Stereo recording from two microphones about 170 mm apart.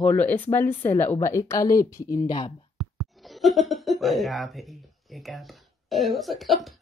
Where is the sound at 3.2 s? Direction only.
Centre (ahead or behind).